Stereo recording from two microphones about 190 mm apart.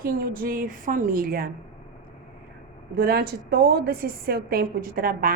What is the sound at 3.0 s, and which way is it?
A woman's voice, 55° right (ahead or behind).